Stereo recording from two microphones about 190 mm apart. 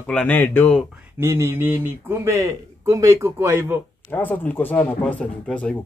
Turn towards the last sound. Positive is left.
turn(degrees=5)  # may be behind; listen again after turning